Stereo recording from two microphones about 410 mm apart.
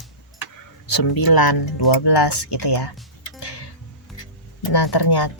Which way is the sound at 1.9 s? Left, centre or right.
Left.